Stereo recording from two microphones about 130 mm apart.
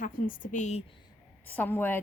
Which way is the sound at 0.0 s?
90° left.